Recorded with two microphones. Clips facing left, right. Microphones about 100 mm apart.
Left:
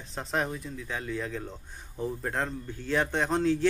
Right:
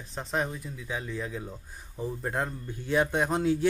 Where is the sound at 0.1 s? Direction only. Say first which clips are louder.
Even; centre (ahead or behind).